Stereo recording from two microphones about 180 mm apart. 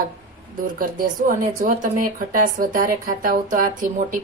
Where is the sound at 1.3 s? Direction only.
45° right (ahead or behind).